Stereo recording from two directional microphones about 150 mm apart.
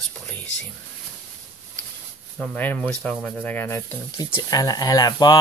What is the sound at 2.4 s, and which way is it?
Speech, 10° left (ahead or behind).